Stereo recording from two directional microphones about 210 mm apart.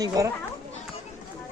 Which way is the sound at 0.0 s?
15° right (ahead or behind).